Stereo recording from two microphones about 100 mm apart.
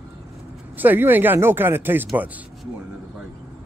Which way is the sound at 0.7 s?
20° right (ahead or behind).